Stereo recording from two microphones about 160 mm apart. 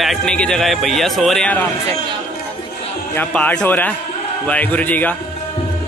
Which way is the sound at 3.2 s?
10° left (ahead or behind).